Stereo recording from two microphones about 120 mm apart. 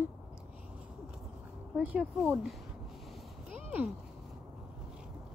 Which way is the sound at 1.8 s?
10° right (ahead or behind).